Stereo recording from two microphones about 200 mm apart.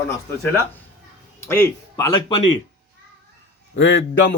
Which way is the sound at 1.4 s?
15° left (ahead or behind).